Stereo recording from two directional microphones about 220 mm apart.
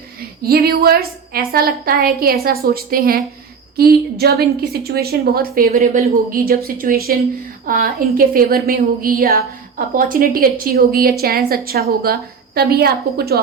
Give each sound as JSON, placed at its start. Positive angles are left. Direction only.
{"t": 0.4, "sound": "a woman's voice", "side_deg": -45}